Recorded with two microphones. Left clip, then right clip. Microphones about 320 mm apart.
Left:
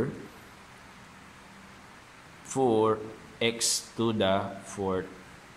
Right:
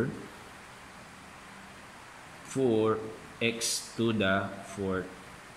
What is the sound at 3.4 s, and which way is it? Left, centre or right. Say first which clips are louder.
Speech: left 3 dB; centre.